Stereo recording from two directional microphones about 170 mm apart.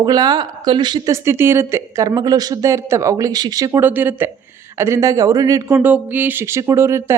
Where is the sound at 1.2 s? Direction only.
15° right (ahead or behind).